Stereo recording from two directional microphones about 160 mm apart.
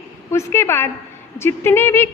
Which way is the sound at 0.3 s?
15° left (ahead or behind).